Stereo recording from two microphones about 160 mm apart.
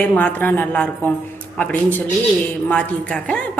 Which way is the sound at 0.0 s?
10° left (ahead or behind).